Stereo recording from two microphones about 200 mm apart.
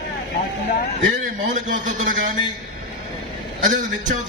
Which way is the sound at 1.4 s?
40° right (ahead or behind).